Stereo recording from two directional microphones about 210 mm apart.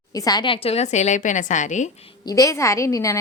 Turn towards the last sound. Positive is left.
turn(degrees=15)  # may be behind; listen again after turning